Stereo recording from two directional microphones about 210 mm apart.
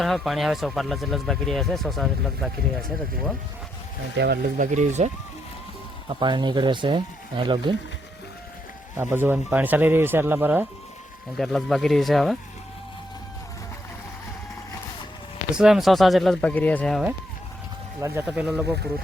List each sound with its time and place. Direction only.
0.0 s speech: centre (ahead or behind)
4.2 s speech: 45° right (ahead or behind)
6.1 s speech: 20° right (ahead or behind)
9.0 s speech: 10° right (ahead or behind)
11.3 s speech: centre (ahead or behind)
15.5 s speech: centre (ahead or behind)
18.0 s speech: 10° right (ahead or behind)